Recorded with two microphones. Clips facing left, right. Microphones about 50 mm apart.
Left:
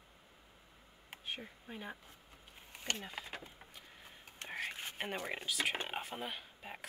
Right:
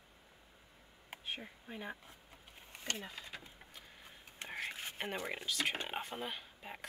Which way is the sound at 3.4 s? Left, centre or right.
Centre.